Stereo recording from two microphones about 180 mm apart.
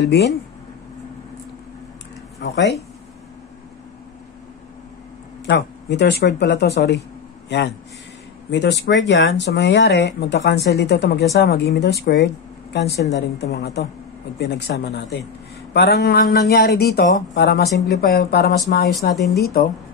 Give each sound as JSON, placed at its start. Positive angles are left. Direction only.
{"t": 0.0, "sound": "speech", "side_deg": 70}
{"t": 2.4, "sound": "speech", "side_deg": 70}
{"t": 5.4, "sound": "speech", "side_deg": 80}